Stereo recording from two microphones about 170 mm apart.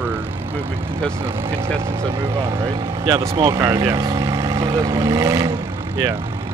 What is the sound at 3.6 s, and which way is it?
Speech, 20° right (ahead or behind).